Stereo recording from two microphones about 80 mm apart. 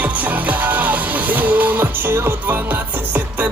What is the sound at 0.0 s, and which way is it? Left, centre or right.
Music, centre.